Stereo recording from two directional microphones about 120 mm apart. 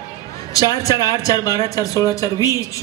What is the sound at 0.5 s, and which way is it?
A woman's voice, 30° left (ahead or behind).